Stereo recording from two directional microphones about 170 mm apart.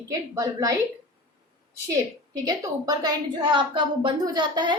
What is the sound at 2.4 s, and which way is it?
A woman's voice, 20° right (ahead or behind).